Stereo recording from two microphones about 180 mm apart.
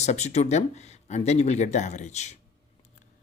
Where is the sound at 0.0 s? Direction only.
40° left (ahead or behind).